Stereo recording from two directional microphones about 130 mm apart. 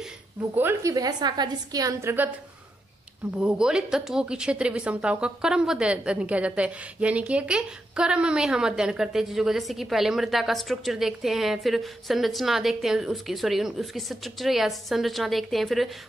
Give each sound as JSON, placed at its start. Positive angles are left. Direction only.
{"t": 0.6, "sound": "a woman's voice", "side_deg": -15}
{"t": 0.9, "sound": "a woman's voice", "side_deg": -30}
{"t": 3.3, "sound": "speech", "side_deg": -5}